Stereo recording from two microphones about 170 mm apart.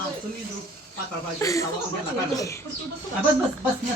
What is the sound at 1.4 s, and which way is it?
Speech, 20° left (ahead or behind).